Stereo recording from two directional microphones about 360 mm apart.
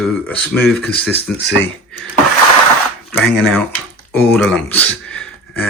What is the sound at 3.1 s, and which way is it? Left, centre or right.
Speech, centre.